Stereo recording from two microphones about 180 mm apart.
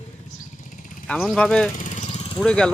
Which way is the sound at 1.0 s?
5° left (ahead or behind).